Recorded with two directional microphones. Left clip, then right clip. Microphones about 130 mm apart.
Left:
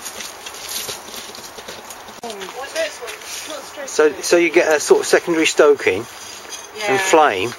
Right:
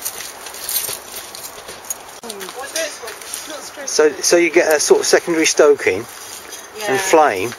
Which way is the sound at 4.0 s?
5° left (ahead or behind).